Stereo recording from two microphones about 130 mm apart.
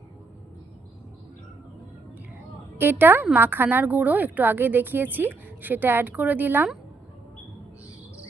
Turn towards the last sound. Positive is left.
turn(degrees=-15)  # may be behind; listen again after turning